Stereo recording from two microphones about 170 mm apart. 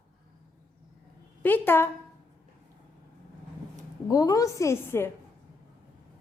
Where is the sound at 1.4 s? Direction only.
10° left (ahead or behind).